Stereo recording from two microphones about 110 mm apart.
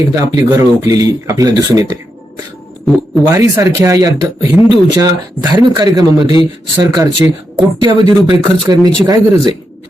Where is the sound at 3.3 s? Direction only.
30° right (ahead or behind).